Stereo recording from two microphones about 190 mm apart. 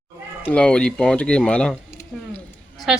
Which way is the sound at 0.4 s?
5° left (ahead or behind).